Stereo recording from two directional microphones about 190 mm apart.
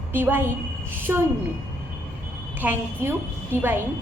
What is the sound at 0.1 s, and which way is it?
A woman's voice, 10° right (ahead or behind).